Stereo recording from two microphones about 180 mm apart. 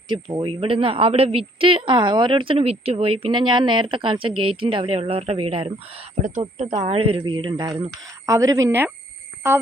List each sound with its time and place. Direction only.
0.1 s a woman's voice: 25° right (ahead or behind)